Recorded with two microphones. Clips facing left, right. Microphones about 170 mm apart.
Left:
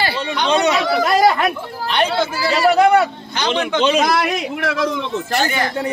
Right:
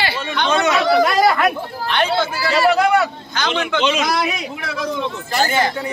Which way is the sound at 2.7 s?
35° left (ahead or behind).